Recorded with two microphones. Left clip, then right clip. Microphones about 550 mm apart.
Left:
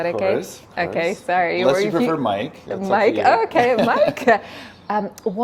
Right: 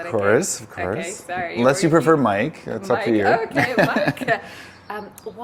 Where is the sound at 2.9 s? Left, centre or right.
Left.